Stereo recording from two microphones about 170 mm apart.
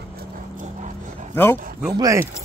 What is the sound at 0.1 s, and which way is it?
Clip-clop, 65° right (ahead or behind).